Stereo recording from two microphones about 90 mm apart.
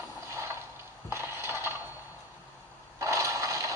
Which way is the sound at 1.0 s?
30° right (ahead or behind).